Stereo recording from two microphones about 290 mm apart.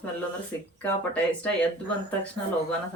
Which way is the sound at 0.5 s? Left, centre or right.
Centre.